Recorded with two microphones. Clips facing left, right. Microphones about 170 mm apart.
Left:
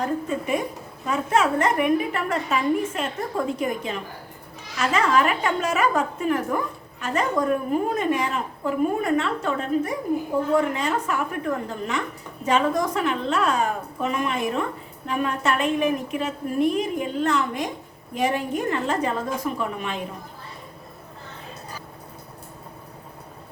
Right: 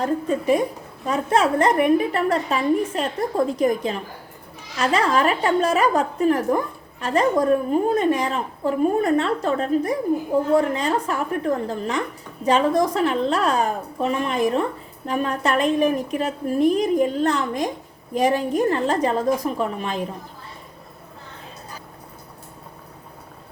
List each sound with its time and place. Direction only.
0.3 s a woman's voice: 35° right (ahead or behind)